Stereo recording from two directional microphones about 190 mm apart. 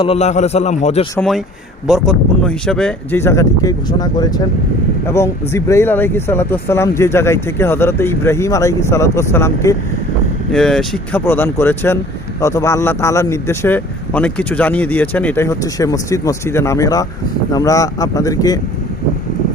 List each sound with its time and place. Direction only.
0.0 s a man's voice: 35° left (ahead or behind)
1.9 s speech: 5° left (ahead or behind)
10.5 s speech: centre (ahead or behind); by 18.6 s 20° left (ahead or behind)